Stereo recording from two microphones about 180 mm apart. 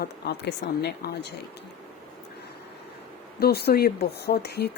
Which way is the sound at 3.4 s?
60° left (ahead or behind).